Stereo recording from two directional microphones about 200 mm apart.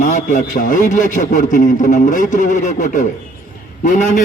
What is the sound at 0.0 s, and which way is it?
A man's voice, 40° left (ahead or behind).